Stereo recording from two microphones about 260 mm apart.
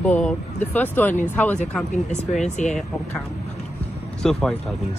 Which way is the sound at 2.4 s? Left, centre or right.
Left.